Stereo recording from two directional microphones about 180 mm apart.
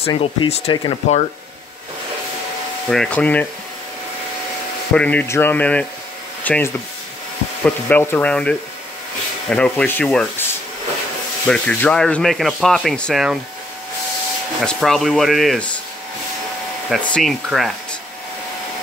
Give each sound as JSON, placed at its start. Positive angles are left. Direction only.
{"t": 0.0, "sound": "speech", "side_deg": 30}
{"t": 2.9, "sound": "speech", "side_deg": 5}
{"t": 4.9, "sound": "speech", "side_deg": 10}
{"t": 11.4, "sound": "speech", "side_deg": 5}
{"t": 14.6, "sound": "speech", "side_deg": 0}
{"t": 16.9, "sound": "speech", "side_deg": 5}